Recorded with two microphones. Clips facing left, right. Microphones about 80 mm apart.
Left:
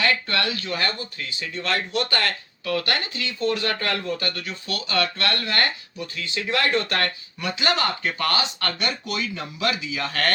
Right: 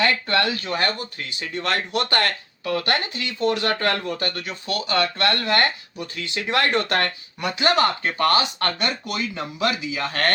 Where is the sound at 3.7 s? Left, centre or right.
Right.